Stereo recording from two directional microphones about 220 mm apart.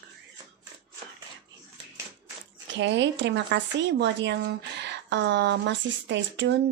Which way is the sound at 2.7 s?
55° right (ahead or behind).